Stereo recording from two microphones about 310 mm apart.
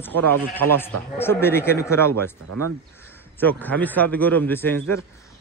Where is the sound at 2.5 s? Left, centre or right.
Right.